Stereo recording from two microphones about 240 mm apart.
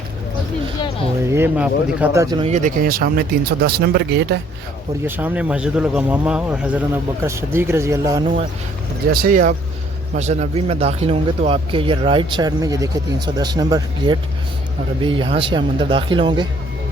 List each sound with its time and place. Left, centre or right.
1.3 s speech: centre
2.5 s speech: right
5.0 s speech: centre
9.1 s speech: right; by 16.5 s centre